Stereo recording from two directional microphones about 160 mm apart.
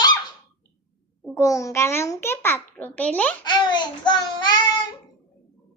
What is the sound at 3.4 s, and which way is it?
Child singing, 25° left (ahead or behind).